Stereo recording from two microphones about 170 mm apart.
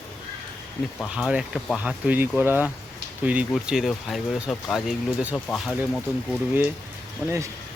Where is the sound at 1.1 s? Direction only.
5° right (ahead or behind).